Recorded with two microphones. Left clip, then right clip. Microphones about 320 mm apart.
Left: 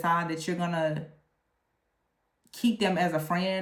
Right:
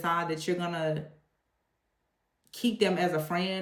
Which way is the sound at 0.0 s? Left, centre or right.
Centre.